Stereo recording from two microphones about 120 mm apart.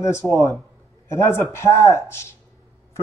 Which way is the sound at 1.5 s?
20° left (ahead or behind).